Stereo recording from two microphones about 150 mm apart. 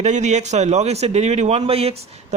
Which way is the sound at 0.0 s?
50° right (ahead or behind).